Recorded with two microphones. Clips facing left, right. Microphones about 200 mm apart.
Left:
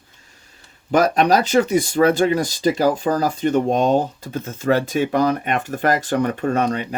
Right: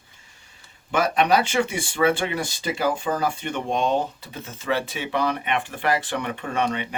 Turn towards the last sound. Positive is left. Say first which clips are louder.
# left 5 dB
turn(degrees=40)  # may be behind; listen again after turning